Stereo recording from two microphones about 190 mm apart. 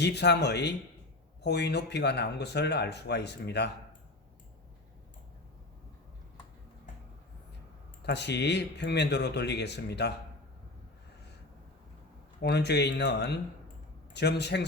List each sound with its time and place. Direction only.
0.0 s speech: 60° left (ahead or behind)
8.0 s speech: 65° left (ahead or behind)
12.4 s speech: 60° left (ahead or behind)